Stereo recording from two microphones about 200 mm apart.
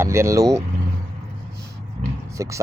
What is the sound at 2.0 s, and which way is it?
Vehicle, 40° right (ahead or behind).